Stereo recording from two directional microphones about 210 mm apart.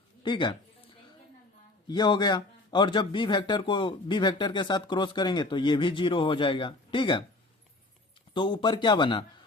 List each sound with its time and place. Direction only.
0.2 s speech: 20° left (ahead or behind)
1.9 s a man's voice: 20° left (ahead or behind)
8.3 s a man's voice: 20° left (ahead or behind)